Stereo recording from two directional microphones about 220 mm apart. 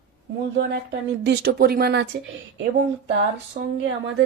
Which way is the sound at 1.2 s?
45° right (ahead or behind).